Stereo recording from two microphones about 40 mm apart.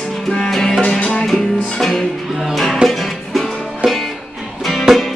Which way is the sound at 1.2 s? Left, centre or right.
Centre.